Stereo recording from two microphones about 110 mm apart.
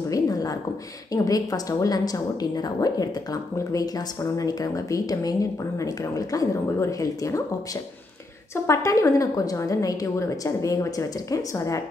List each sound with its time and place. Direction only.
0.1 s a sound: 35° left (ahead or behind)
1.1 s a woman's voice: 35° left (ahead or behind)
8.6 s a woman's voice: 30° left (ahead or behind)